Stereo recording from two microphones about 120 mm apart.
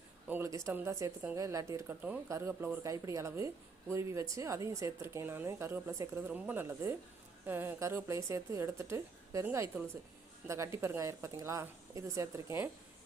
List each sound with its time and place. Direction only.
0.3 s speech: 20° right (ahead or behind)
6.2 s a woman's voice: 15° right (ahead or behind)